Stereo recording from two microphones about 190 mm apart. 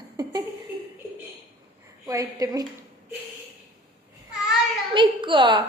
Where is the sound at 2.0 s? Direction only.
20° right (ahead or behind).